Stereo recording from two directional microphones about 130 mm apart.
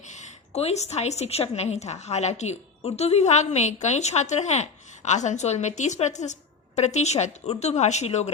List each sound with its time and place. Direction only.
0.1 s a woman's voice: 55° left (ahead or behind)